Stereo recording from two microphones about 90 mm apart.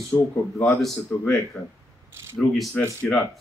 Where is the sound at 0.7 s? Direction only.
5° left (ahead or behind).